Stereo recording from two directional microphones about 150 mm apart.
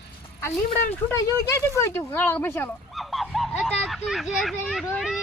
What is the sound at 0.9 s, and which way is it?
Speech, 20° left (ahead or behind).